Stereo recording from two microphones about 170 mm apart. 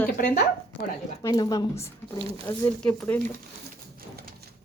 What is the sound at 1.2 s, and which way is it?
Speech, 25° left (ahead or behind).